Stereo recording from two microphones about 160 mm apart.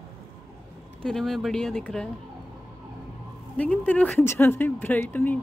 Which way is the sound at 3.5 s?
10° left (ahead or behind).